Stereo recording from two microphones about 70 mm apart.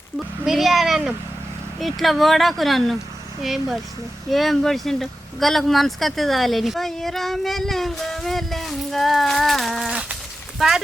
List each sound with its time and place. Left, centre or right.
0.4 s speech: centre
9.9 s sheep: centre
10.6 s speech: centre